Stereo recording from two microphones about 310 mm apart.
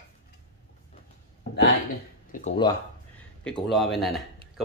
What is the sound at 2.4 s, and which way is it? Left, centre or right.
Speech, centre.